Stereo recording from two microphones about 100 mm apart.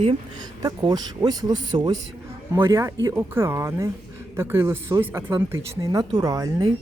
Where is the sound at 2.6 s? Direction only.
30° right (ahead or behind).